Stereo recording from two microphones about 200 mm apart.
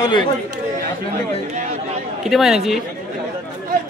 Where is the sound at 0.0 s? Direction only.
25° left (ahead or behind).